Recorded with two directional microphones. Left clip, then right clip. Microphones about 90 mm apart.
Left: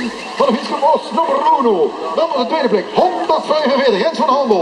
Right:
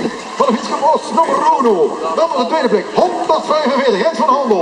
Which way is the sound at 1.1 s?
20° right (ahead or behind).